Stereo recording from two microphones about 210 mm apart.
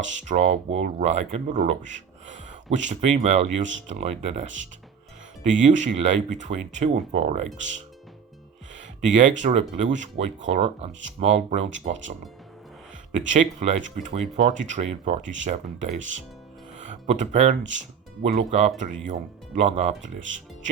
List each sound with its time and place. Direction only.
0.1 s speech: 35° right (ahead or behind)
9.0 s speech: 35° right (ahead or behind)
13.1 s speech: 35° right (ahead or behind)